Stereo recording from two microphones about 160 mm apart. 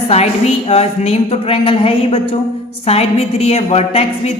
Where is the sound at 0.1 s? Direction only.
40° left (ahead or behind).